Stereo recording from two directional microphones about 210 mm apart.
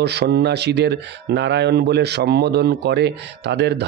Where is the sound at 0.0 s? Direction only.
55° right (ahead or behind).